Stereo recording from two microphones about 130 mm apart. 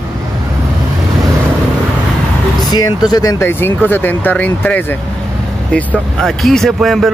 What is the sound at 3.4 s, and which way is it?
Speech, 15° left (ahead or behind).